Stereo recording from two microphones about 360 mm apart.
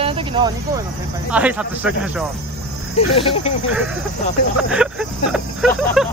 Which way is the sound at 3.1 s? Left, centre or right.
Centre.